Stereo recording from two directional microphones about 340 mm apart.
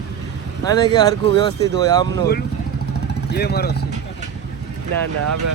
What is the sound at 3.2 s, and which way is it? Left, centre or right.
Speech, left.